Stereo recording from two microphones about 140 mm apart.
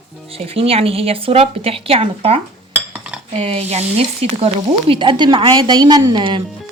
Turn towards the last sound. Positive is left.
turn(degrees=-35)  # may be behind; listen again after turning